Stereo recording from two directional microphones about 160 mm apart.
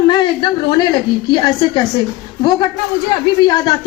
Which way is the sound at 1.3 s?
25° left (ahead or behind).